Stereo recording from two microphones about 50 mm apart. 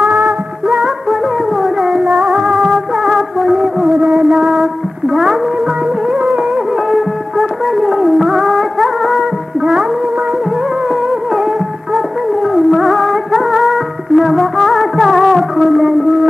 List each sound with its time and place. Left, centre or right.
0.0 s music: right
1.6 s music: centre
4.0 s music: centre
6.9 s music: centre
12.5 s music: centre